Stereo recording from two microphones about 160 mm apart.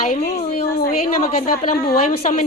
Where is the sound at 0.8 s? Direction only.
65° left (ahead or behind).